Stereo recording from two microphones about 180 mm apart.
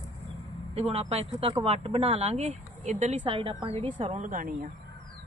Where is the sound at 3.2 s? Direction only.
30° right (ahead or behind).